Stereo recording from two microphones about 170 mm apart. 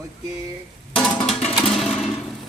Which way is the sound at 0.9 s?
5° left (ahead or behind).